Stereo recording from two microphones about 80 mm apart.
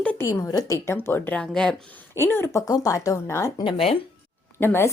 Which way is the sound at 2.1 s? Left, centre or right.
Left.